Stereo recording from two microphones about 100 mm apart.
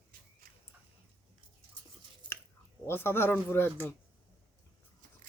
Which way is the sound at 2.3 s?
55° right (ahead or behind).